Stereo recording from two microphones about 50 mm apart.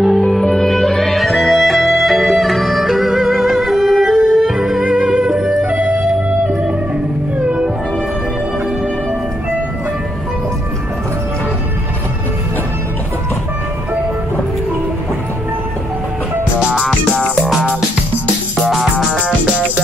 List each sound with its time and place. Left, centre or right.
0.0 s music: centre
5.7 s music: right
7.4 s music: right
16.5 s music: centre
17.5 s music: centre
19.1 s music: centre